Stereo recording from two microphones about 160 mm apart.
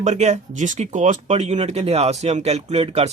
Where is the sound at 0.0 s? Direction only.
45° right (ahead or behind).